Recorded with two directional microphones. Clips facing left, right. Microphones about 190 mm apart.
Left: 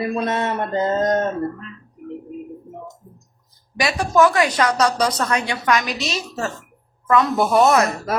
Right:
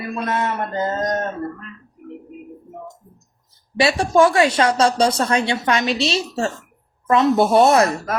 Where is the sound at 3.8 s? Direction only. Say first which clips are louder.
Right 2 dB; 25° right (ahead or behind).